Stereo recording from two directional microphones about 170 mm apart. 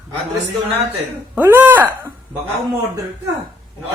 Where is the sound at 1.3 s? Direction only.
10° right (ahead or behind).